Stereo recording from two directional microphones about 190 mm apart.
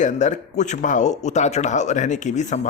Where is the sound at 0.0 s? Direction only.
40° left (ahead or behind).